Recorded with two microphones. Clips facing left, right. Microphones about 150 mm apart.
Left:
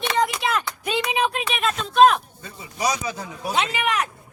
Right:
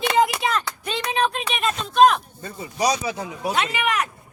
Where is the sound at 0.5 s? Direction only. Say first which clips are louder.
Left 2 dB; 10° left (ahead or behind).